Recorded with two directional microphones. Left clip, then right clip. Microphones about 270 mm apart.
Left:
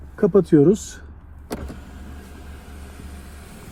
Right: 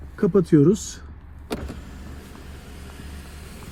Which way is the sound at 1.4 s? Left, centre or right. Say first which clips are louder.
Right 1 dB; centre.